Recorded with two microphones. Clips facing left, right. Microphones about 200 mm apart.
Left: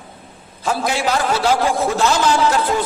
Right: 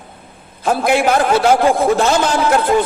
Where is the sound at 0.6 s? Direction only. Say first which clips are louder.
Right 5 dB; 55° right (ahead or behind).